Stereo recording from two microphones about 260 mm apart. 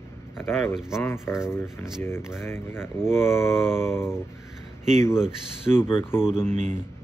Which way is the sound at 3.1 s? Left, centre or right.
Centre.